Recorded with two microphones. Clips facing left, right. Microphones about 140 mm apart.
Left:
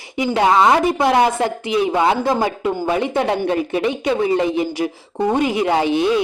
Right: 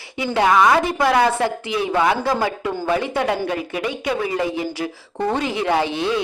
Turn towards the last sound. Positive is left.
turn(degrees=15)  # may be behind; listen again after turning